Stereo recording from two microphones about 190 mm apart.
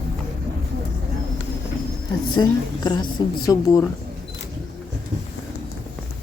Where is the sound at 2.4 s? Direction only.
20° left (ahead or behind).